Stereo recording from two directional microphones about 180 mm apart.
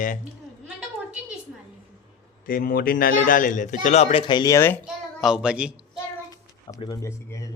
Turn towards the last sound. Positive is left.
turn(degrees=15)  # may be behind; listen again after turning